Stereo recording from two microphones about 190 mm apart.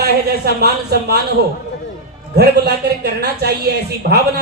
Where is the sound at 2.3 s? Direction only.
60° right (ahead or behind).